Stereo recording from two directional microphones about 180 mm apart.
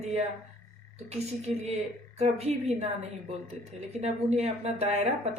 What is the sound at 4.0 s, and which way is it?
Speech, 35° right (ahead or behind).